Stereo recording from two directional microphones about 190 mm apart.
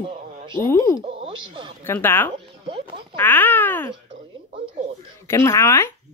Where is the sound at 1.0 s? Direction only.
30° right (ahead or behind).